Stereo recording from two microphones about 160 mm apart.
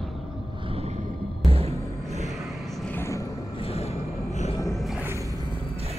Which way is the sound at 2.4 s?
Centre (ahead or behind).